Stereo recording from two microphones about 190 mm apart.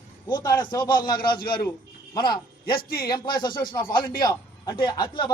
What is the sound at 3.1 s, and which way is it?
A man's voice, 25° left (ahead or behind).